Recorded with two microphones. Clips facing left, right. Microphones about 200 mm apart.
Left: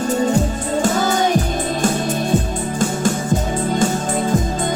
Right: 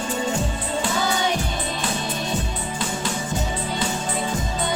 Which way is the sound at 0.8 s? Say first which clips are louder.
Left 7 dB; 45° left (ahead or behind).